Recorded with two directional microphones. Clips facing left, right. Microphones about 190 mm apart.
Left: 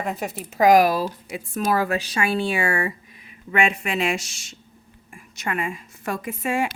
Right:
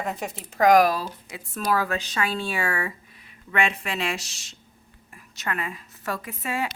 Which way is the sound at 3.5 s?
10° left (ahead or behind).